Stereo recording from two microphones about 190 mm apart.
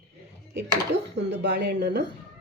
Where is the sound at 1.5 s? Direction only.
60° right (ahead or behind).